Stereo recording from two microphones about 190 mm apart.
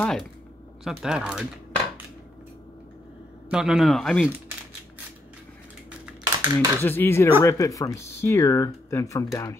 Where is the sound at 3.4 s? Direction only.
5° right (ahead or behind).